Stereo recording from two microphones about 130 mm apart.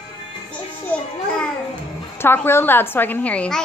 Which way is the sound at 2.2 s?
15° left (ahead or behind).